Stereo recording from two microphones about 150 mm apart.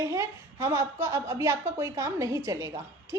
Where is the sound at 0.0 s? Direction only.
20° right (ahead or behind).